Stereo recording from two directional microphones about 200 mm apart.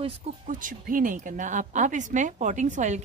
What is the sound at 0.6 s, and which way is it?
A woman's voice, 40° right (ahead or behind).